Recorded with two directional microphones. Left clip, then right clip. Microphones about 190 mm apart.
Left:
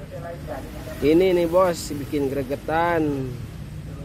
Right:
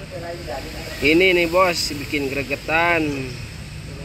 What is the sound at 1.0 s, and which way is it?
Speech, 20° left (ahead or behind).